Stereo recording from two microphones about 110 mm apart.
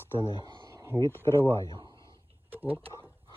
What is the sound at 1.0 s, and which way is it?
Speech, 25° left (ahead or behind).